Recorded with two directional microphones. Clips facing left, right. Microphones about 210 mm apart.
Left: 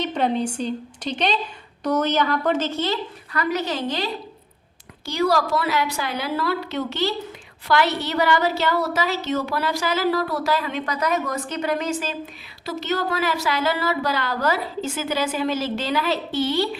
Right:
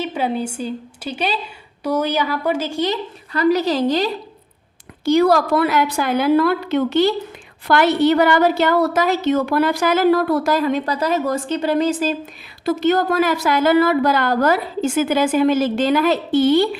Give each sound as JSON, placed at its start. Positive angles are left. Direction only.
{"t": 0.0, "sound": "a woman's voice", "side_deg": -5}
{"t": 3.3, "sound": "a woman's voice", "side_deg": -35}
{"t": 5.0, "sound": "a woman's voice", "side_deg": -55}
{"t": 12.6, "sound": "a woman's voice", "side_deg": -50}